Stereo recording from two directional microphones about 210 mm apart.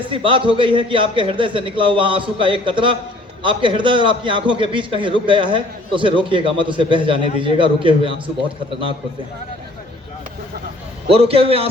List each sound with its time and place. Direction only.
0.1 s a man's voice: 25° right (ahead or behind)
11.1 s a man's voice: 25° right (ahead or behind)